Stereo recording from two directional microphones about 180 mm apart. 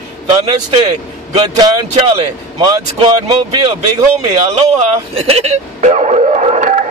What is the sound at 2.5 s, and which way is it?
Speech, 20° right (ahead or behind).